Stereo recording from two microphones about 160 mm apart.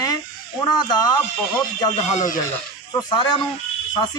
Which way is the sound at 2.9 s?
25° left (ahead or behind).